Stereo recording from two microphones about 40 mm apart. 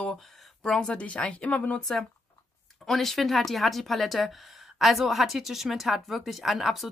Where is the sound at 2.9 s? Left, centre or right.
Centre.